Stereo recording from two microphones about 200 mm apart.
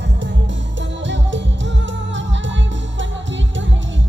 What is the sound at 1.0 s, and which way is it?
Music, 65° right (ahead or behind).